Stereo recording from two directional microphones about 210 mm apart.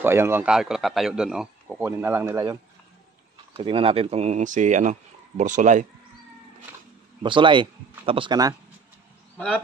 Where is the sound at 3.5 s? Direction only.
25° right (ahead or behind).